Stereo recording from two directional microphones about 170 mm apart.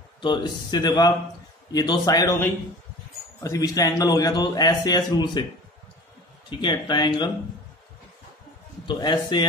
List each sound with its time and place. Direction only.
0.2 s a man's voice: 25° left (ahead or behind)
6.6 s a man's voice: 25° left (ahead or behind)
8.8 s a man's voice: 25° left (ahead or behind)